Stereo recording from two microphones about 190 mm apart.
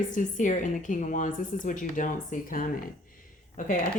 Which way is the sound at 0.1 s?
40° left (ahead or behind).